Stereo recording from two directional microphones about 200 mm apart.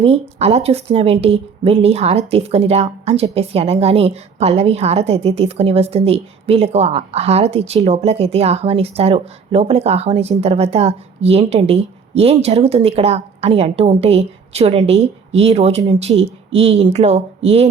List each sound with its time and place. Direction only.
0.0 s a woman's voice: 30° right (ahead or behind)